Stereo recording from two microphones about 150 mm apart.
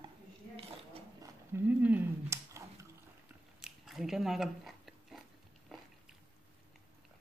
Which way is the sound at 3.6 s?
Centre (ahead or behind).